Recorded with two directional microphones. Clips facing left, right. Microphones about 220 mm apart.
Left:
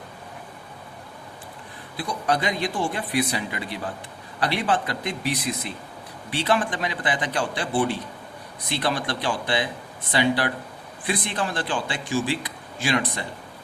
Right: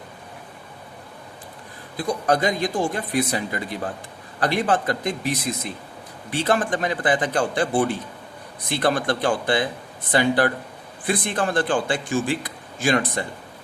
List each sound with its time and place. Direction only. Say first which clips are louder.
2.0 s speech: right 4 dB; 45° right (ahead or behind)